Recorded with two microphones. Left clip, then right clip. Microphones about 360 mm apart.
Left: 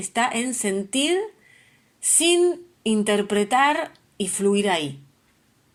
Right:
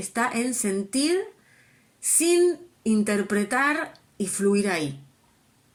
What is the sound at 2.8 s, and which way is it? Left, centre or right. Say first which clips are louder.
Speech: left 5 dB; left.